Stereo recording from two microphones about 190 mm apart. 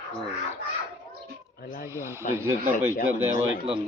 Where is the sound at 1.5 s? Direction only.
50° left (ahead or behind).